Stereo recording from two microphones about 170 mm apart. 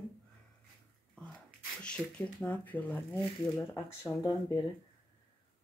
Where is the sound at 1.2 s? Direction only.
5° left (ahead or behind).